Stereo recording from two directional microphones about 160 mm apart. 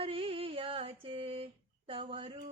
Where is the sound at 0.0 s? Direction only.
35° right (ahead or behind).